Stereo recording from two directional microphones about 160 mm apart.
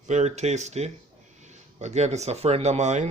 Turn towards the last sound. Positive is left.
turn(degrees=-45)  # may be behind; listen again after turning